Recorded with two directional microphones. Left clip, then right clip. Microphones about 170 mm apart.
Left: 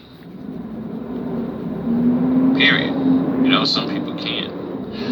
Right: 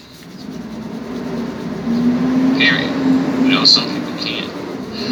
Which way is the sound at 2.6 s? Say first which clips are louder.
Right 1 dB; 55° left (ahead or behind).